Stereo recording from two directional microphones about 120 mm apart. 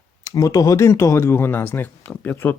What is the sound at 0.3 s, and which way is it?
Speech, 30° left (ahead or behind).